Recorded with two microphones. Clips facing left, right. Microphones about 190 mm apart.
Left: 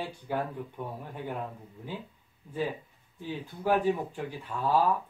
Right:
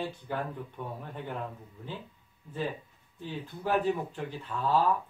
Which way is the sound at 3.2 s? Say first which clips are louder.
Left 4 dB; 10° left (ahead or behind).